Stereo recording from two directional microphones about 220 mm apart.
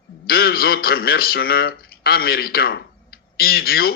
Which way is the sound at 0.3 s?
45° left (ahead or behind).